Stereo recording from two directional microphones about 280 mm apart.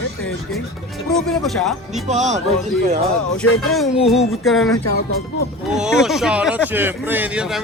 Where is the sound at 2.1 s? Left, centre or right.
Right.